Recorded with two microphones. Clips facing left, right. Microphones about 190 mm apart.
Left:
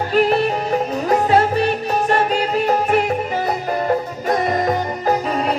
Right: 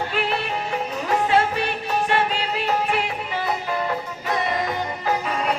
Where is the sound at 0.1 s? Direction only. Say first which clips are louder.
Left 9 dB; 40° left (ahead or behind).